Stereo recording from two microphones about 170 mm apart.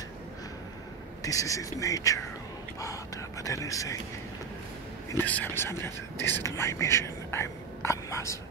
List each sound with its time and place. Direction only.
1.2 s speech: 20° left (ahead or behind)
5.1 s speech: 10° left (ahead or behind)